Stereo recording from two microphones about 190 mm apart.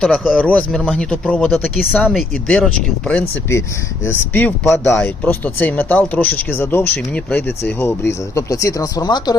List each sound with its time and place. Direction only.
0.0 s speech: 5° left (ahead or behind); by 9.3 s 20° left (ahead or behind)